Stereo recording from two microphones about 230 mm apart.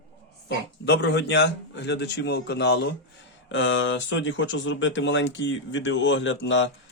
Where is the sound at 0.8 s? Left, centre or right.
Left.